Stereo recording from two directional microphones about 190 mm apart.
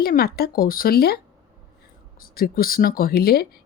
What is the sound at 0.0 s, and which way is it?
Speech, 55° left (ahead or behind).